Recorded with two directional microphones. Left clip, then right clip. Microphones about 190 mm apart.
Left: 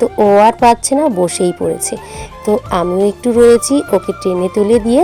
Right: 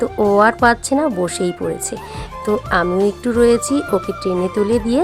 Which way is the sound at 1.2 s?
25° right (ahead or behind).